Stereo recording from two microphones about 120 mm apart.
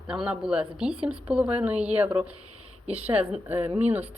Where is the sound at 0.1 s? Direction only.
5° right (ahead or behind).